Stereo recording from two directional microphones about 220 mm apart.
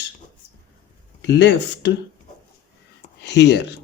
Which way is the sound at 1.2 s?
50° left (ahead or behind).